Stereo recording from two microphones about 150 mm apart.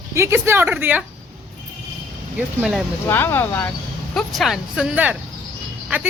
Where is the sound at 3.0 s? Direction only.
15° left (ahead or behind).